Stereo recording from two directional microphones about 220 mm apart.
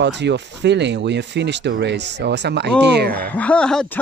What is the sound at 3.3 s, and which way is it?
Speech, 5° left (ahead or behind).